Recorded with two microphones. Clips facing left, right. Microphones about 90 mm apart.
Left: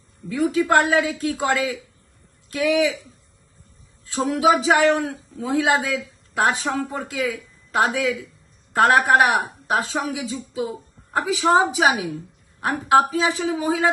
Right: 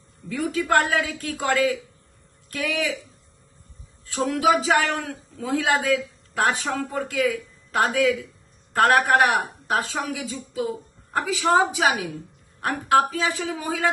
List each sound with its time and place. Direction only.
0.3 s a man's voice: 20° left (ahead or behind)
4.3 s a man's voice: 15° left (ahead or behind)